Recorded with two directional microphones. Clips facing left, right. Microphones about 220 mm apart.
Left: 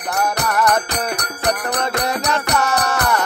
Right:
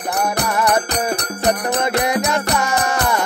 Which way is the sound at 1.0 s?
25° right (ahead or behind).